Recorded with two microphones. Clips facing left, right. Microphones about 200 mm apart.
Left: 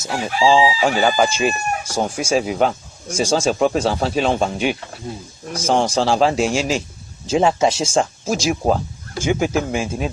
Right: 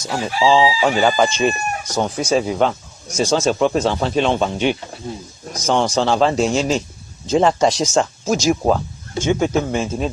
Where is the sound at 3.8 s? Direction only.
35° left (ahead or behind).